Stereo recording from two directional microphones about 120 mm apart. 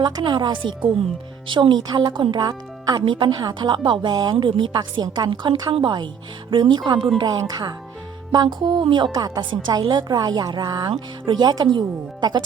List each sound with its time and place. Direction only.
0.0 s a woman's voice: 40° right (ahead or behind)